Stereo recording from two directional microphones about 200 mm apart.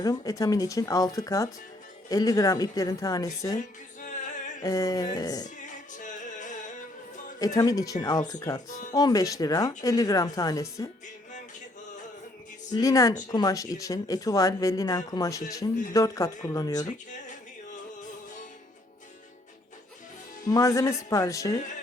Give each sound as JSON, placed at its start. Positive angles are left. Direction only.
{"t": 0.0, "sound": "speech", "side_deg": 15}
{"t": 4.0, "sound": "music", "side_deg": 40}
{"t": 4.6, "sound": "speech", "side_deg": 15}
{"t": 5.5, "sound": "music", "side_deg": 40}
{"t": 7.3, "sound": "speech", "side_deg": 20}
{"t": 12.7, "sound": "speech", "side_deg": 15}
{"t": 16.8, "sound": "speech", "side_deg": 40}
{"t": 20.5, "sound": "speech", "side_deg": 15}